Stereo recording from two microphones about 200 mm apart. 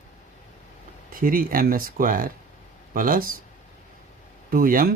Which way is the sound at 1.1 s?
45° right (ahead or behind).